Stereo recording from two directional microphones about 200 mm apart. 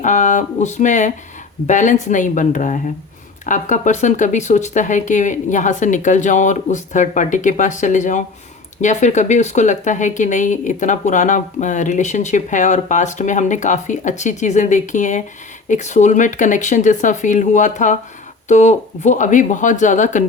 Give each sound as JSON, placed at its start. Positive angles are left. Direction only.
{"t": 0.0, "sound": "speech", "side_deg": 40}